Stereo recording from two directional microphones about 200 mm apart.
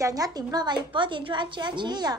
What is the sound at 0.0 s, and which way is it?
A woman's voice, 20° right (ahead or behind).